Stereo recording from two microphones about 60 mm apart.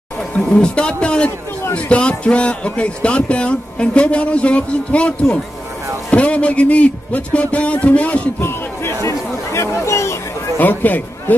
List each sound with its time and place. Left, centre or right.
0.4 s a man's voice: centre
8.4 s speech: left
10.6 s a man's voice: left